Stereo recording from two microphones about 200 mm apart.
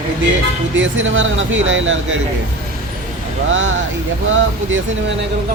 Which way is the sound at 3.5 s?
70° right (ahead or behind).